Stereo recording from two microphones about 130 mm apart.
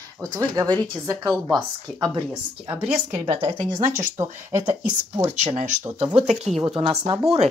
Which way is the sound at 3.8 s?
70° right (ahead or behind).